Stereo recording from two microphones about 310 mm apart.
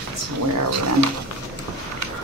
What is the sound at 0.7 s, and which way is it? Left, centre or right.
Speech, right.